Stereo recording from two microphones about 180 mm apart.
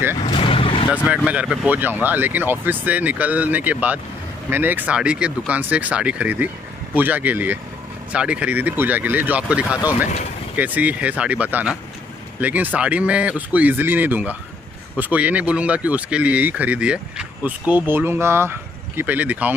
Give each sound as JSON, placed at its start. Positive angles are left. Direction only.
{"t": 0.2, "sound": "vehicle", "side_deg": 30}
{"t": 1.0, "sound": "speech", "side_deg": -5}